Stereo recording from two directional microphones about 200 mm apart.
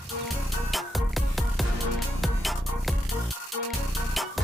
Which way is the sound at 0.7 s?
Centre (ahead or behind).